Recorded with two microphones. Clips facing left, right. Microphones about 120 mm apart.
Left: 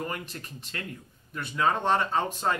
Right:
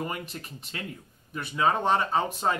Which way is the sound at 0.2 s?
10° right (ahead or behind).